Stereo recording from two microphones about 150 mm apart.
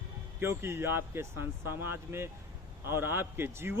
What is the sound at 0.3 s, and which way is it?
Speech, 15° right (ahead or behind).